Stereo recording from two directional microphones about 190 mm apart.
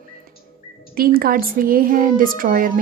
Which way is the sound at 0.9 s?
50° right (ahead or behind).